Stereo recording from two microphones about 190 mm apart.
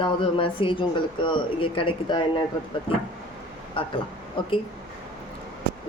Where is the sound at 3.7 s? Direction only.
25° left (ahead or behind).